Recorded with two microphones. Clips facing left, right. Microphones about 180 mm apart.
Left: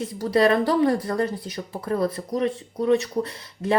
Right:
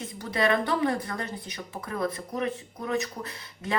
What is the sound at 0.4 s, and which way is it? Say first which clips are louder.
Speech: left 4 dB; 35° left (ahead or behind).